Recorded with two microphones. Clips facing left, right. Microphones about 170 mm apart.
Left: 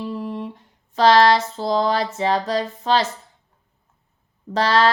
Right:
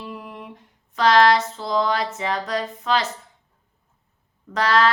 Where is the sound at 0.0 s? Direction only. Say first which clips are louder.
Left 8 dB; 30° left (ahead or behind).